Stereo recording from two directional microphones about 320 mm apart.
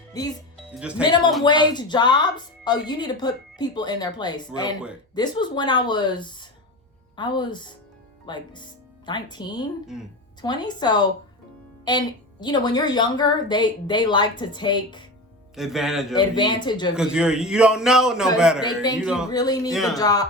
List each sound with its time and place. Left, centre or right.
0.1 s speech: centre
0.8 s a man's voice: centre
1.5 s speech: centre
15.5 s a man's voice: centre
16.1 s speech: centre
16.9 s a man's voice: centre
18.6 s speech: centre
18.9 s a man's voice: centre
19.3 s speech: centre
19.7 s a man's voice: centre
20.0 s speech: centre